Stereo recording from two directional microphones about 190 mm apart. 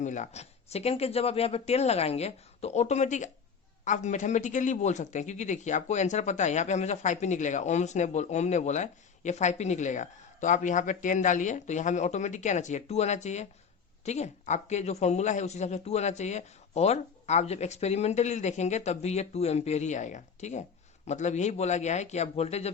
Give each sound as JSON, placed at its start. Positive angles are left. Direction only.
{"t": 0.0, "sound": "speech", "side_deg": 40}